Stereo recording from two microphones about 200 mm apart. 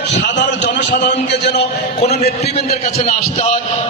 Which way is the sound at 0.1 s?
60° left (ahead or behind).